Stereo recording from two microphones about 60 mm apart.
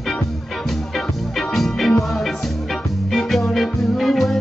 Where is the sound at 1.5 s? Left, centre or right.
Centre.